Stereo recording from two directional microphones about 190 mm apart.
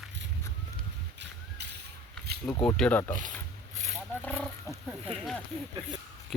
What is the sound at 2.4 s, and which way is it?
Speech, 5° left (ahead or behind).